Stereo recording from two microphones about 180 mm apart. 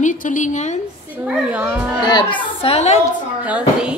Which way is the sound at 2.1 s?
25° left (ahead or behind).